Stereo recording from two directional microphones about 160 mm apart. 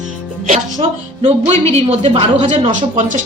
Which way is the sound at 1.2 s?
40° right (ahead or behind).